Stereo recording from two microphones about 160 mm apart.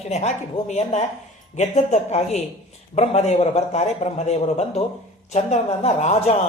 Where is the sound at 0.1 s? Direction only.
45° left (ahead or behind).